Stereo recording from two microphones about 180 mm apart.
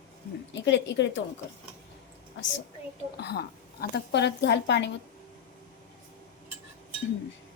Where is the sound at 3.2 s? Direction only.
65° left (ahead or behind).